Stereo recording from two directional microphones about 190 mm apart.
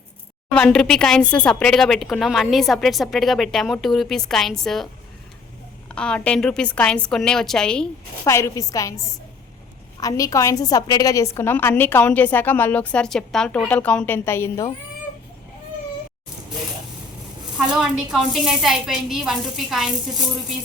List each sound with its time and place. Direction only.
0.5 s speech: 5° left (ahead or behind)
5.9 s speech: 5° left (ahead or behind)
8.2 s a woman's voice: 15° left (ahead or behind)
17.7 s speech: 5° right (ahead or behind)